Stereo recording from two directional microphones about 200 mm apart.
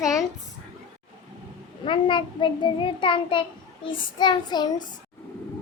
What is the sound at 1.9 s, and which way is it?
A child's voice, 25° left (ahead or behind).